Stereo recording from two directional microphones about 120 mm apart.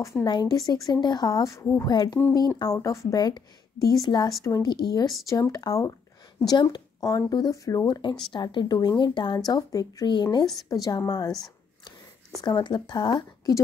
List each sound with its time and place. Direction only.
0.0 s a woman's voice: 30° left (ahead or behind)
1.9 s speech: 35° left (ahead or behind)
4.4 s a woman's voice: 25° left (ahead or behind)
4.6 s a woman's voice: 35° left (ahead or behind)
8.3 s speech: 40° left (ahead or behind)
12.4 s speech: 35° left (ahead or behind)